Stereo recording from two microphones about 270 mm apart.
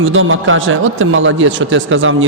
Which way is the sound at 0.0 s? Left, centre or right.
Right.